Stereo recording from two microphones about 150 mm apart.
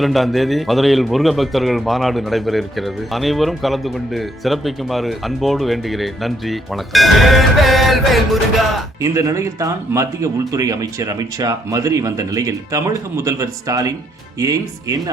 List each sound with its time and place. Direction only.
0.0 s a man's voice: centre (ahead or behind)
9.0 s speech: 20° right (ahead or behind)